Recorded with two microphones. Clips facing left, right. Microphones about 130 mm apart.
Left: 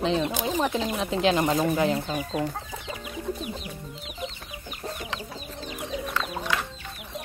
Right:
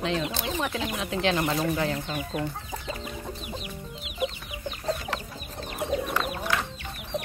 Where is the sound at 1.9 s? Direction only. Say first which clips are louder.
Left 3 dB; 25° left (ahead or behind).